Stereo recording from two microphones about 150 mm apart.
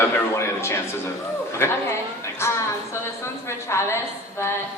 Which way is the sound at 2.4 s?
15° left (ahead or behind).